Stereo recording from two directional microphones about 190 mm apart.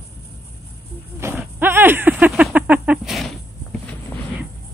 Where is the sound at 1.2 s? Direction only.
10° right (ahead or behind).